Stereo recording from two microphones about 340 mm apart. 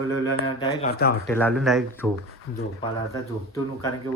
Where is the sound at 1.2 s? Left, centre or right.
Centre.